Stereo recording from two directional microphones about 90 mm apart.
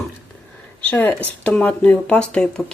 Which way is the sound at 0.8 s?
15° left (ahead or behind).